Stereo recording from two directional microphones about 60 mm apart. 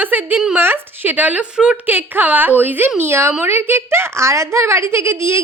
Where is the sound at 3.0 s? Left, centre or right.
Right.